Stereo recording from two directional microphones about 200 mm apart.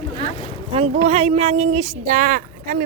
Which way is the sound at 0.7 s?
30° right (ahead or behind).